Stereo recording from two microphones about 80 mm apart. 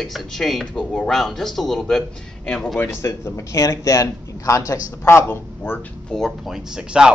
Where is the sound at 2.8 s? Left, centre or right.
Left.